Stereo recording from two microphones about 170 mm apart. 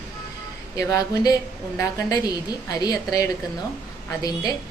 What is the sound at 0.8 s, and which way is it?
A woman's voice, 20° left (ahead or behind).